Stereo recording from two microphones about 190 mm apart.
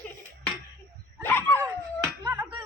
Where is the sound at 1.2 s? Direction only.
10° left (ahead or behind).